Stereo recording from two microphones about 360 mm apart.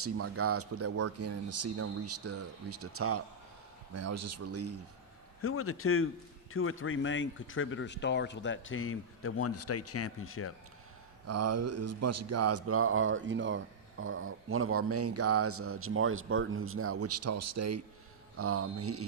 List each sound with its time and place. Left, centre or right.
0.0 s speech: right
5.4 s speech: left
11.3 s speech: right